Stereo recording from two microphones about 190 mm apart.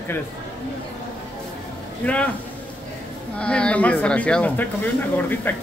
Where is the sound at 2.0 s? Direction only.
5° left (ahead or behind).